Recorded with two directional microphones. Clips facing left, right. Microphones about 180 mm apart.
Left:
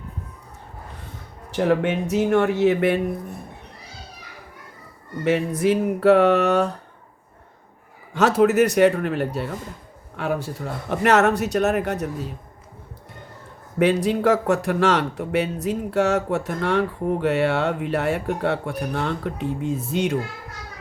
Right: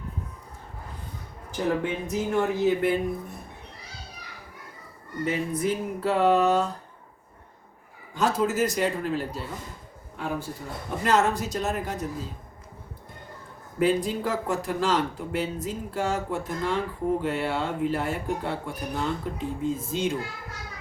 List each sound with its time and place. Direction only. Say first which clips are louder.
1.5 s speech: left 6 dB; 80° left
5.2 s speech: left 6 dB; 75° left (ahead or behind)
8.1 s speech: left 8 dB; 70° left (ahead or behind)
10.2 s speech: left 6 dB; 80° left
13.7 s speech: left 5 dB; 75° left (ahead or behind)